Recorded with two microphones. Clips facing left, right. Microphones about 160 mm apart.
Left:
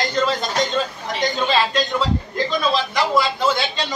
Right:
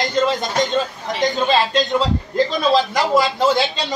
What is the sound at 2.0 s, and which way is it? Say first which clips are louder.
A man's voice: right 3 dB; 40° right (ahead or behind).